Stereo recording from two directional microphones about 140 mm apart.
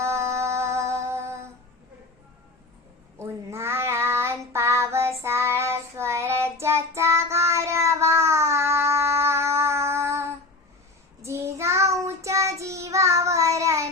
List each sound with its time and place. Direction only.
0.0 s music: 20° right (ahead or behind)
3.2 s child singing: 20° right (ahead or behind)